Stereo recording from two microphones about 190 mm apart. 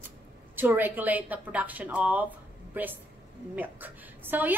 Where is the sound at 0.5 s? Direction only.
10° right (ahead or behind).